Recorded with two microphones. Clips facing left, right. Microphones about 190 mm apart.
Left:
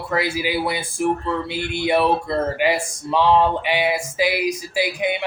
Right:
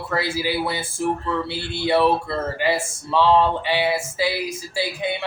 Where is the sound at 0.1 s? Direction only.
15° left (ahead or behind).